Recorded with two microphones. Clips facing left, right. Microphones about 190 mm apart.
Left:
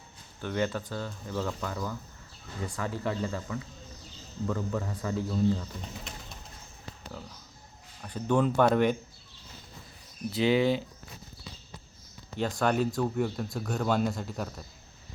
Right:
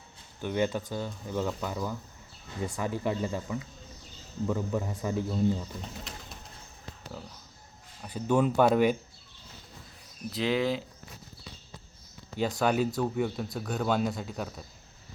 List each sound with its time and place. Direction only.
0.4 s a man's voice: 15° right (ahead or behind)
8.0 s a man's voice: 10° right (ahead or behind)
10.2 s speech: centre (ahead or behind)
12.4 s speech: 5° right (ahead or behind)